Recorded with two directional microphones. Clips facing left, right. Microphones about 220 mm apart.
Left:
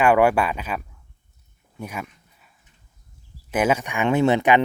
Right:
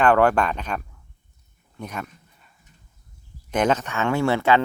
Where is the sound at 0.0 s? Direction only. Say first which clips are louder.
Left 1 dB; 10° left (ahead or behind).